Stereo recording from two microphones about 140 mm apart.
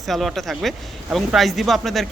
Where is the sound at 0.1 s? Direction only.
Centre (ahead or behind).